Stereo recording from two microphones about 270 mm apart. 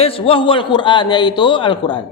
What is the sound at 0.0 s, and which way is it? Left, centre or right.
Speech, centre.